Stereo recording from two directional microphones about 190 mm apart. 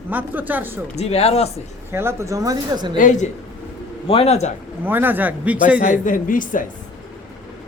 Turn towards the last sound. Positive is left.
turn(degrees=45)  # may be behind; listen again after turning